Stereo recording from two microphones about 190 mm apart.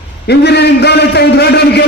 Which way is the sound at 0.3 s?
60° left (ahead or behind).